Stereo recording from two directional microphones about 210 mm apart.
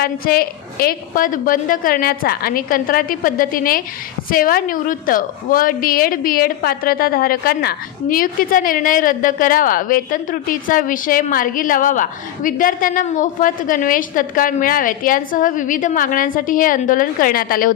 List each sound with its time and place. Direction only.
0.0 s a woman's voice: 45° left (ahead or behind)